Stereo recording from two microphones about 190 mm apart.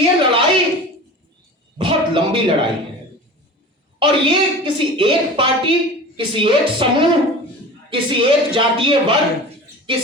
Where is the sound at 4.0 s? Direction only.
25° right (ahead or behind).